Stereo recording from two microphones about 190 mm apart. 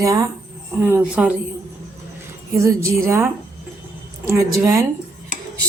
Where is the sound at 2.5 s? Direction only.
15° right (ahead or behind).